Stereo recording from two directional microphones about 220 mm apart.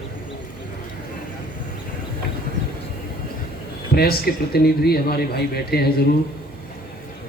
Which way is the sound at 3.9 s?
45° left (ahead or behind).